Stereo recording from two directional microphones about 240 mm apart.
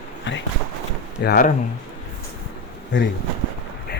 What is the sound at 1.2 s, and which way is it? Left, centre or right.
Speech, left.